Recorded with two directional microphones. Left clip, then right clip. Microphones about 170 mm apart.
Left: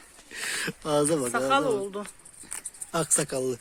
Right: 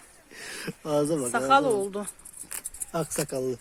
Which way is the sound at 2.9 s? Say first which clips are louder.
Left 2 dB; centre (ahead or behind).